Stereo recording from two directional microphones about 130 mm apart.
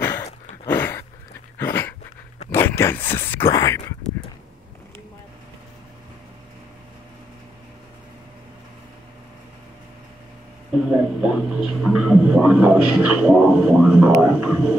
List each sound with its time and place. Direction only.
0.0 s a sound: 20° left (ahead or behind)
1.6 s dog: 20° left (ahead or behind)
2.5 s speech: 20° left (ahead or behind)
10.9 s a man's voice: 5° right (ahead or behind)